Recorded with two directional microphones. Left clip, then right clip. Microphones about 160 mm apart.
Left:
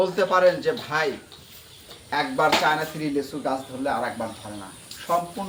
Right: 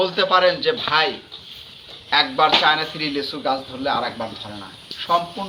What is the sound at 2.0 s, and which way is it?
Speech, 15° left (ahead or behind).